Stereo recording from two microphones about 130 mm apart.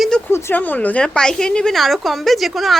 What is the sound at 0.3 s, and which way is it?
A woman's voice, 20° left (ahead or behind).